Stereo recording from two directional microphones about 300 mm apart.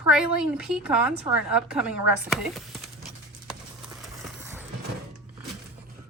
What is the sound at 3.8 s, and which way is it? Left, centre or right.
Clip-clop, centre.